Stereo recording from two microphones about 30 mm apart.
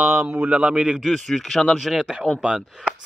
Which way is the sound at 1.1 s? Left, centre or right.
Centre.